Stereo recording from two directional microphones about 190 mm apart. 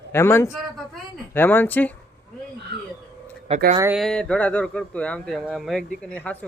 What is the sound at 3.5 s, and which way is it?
Speech, 30° right (ahead or behind).